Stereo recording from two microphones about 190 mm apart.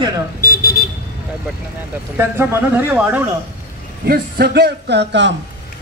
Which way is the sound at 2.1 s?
10° right (ahead or behind).